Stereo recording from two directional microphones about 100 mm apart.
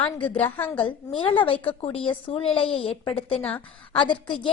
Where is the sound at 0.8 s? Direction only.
60° left (ahead or behind).